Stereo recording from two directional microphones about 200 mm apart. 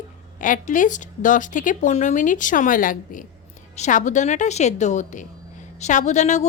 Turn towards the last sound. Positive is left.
turn(degrees=35)  # may be behind; listen again after turning